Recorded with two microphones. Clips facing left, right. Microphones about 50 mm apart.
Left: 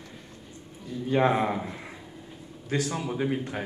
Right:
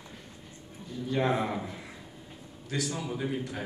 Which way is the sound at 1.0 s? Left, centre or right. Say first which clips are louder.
Left 5 dB; left.